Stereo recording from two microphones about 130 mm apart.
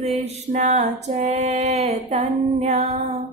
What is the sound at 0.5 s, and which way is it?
Mantra, 60° right (ahead or behind).